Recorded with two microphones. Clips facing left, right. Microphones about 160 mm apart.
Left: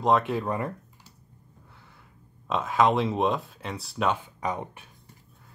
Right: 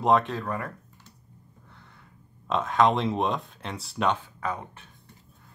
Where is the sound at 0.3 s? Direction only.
20° left (ahead or behind).